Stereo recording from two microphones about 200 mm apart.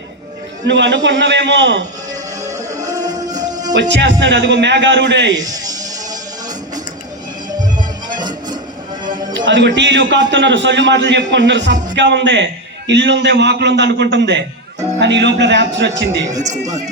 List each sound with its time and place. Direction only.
0.7 s a man's voice: 60° right (ahead or behind)
3.2 s music: 20° right (ahead or behind)
3.8 s a man's voice: 60° right (ahead or behind)
5.3 s music: 20° right (ahead or behind)
9.3 s a man's voice: 65° right (ahead or behind)